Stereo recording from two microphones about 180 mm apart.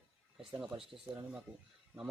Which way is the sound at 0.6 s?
5° right (ahead or behind).